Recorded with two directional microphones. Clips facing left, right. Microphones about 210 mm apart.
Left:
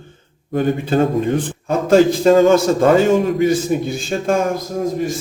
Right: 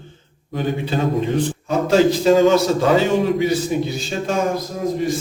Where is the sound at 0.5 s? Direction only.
50° left (ahead or behind).